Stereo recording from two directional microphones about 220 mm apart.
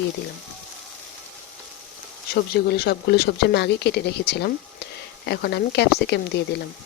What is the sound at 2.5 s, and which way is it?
Speech, 45° left (ahead or behind).